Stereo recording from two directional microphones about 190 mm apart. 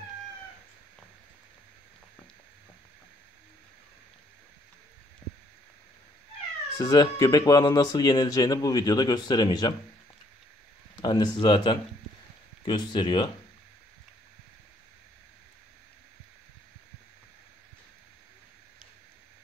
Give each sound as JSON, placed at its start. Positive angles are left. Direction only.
{"t": 6.8, "sound": "speech", "side_deg": 20}
{"t": 11.0, "sound": "speech", "side_deg": 25}